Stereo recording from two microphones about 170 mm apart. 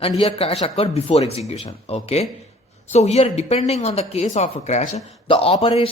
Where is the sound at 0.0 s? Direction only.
35° left (ahead or behind).